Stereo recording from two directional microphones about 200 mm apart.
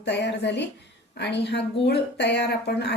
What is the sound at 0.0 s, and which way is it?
A woman's voice, 60° left (ahead or behind).